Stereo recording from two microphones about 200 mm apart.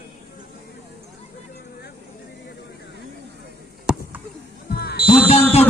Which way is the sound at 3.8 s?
5° right (ahead or behind).